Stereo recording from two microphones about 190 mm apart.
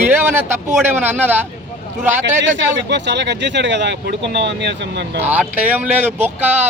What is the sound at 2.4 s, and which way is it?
Speech, 70° right (ahead or behind).